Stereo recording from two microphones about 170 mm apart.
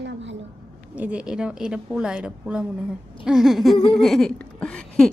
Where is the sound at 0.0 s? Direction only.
90° right.